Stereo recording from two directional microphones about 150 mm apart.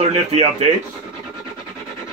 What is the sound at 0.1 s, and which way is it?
Speech, 45° right (ahead or behind).